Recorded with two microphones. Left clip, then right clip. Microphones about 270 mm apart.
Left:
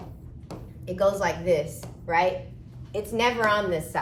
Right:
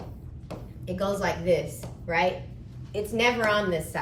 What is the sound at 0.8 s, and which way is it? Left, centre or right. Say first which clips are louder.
A woman's voice: left 4 dB; centre.